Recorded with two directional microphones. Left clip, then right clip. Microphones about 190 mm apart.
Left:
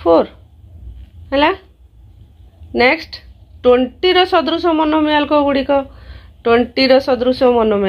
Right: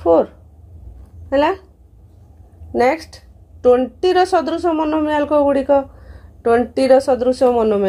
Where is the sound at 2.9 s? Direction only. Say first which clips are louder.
Left 3 dB; 25° left (ahead or behind).